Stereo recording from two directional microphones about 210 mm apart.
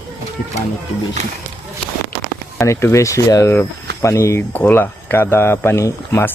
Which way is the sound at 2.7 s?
15° left (ahead or behind).